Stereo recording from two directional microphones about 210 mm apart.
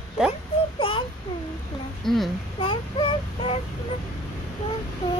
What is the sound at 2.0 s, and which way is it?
Speech, centre (ahead or behind).